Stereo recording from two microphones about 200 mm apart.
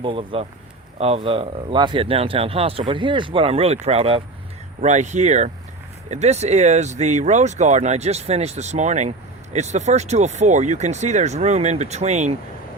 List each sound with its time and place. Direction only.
0.0 s speech: 25° right (ahead or behind)